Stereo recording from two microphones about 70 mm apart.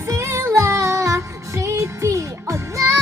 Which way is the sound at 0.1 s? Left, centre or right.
Right.